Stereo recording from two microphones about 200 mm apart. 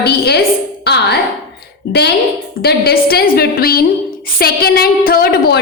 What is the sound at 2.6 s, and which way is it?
A woman's voice, 50° left (ahead or behind).